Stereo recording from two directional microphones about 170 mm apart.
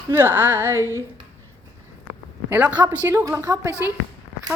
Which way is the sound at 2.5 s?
10° right (ahead or behind).